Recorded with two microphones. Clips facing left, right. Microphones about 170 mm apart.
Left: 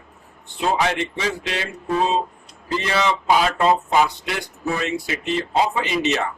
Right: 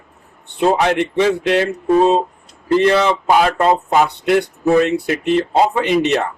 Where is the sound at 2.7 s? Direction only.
55° right (ahead or behind).